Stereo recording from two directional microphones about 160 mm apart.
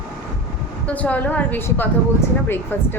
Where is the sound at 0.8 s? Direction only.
10° left (ahead or behind).